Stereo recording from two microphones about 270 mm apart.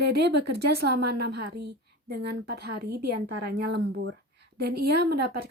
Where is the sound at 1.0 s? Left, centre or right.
Right.